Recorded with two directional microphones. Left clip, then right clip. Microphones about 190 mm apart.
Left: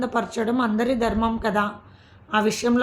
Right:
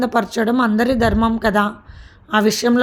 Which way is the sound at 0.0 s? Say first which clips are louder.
Right 6 dB; 45° right (ahead or behind).